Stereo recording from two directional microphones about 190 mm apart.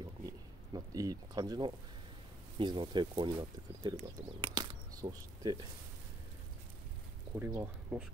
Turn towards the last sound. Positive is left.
turn(degrees=-10)  # may be behind; listen again after turning